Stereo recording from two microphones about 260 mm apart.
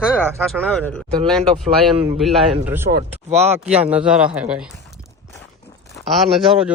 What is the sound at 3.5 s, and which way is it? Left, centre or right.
Speech, centre.